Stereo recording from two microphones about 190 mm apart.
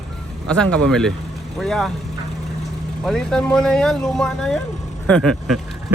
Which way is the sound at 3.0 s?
5° left (ahead or behind).